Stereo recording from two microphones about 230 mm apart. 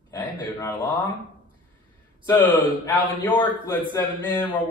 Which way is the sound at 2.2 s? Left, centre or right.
Centre.